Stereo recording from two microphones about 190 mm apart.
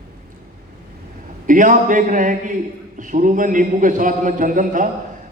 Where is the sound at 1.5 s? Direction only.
45° right (ahead or behind).